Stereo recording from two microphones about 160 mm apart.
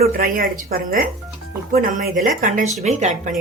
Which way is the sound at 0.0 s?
65° right (ahead or behind).